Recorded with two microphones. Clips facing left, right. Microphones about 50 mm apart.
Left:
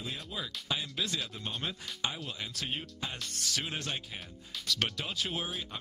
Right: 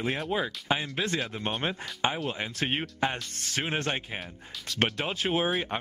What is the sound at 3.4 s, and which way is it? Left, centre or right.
Speech, right.